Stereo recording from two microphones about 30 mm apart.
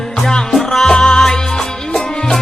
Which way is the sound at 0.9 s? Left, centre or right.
Centre.